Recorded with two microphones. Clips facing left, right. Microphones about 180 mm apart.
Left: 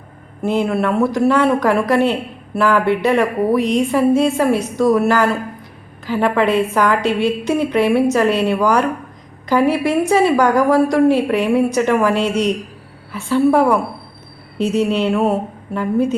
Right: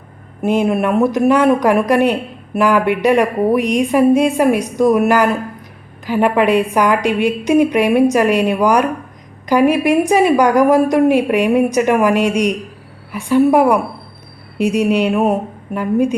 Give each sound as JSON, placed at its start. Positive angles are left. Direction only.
{"t": 0.4, "sound": "a woman's voice", "side_deg": -20}